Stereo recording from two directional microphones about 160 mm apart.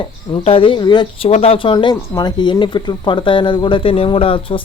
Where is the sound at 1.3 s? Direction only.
40° left (ahead or behind).